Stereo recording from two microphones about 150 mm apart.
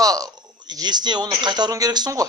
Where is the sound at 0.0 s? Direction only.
25° right (ahead or behind).